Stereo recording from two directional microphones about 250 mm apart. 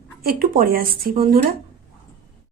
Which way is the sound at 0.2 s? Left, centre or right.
Right.